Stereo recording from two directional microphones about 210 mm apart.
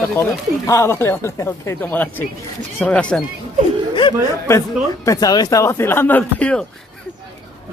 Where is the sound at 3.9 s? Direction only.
25° left (ahead or behind); by 6.6 s 5° left (ahead or behind).